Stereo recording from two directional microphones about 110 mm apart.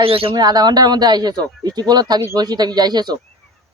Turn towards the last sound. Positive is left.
turn(degrees=-40)  # may be behind; listen again after turning